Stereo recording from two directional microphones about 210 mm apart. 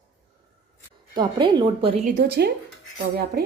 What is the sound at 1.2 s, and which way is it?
Speech, 20° right (ahead or behind).